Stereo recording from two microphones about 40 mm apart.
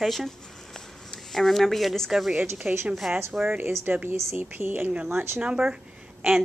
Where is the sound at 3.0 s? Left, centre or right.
Centre.